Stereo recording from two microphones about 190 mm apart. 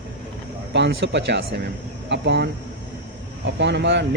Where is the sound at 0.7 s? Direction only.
65° right (ahead or behind).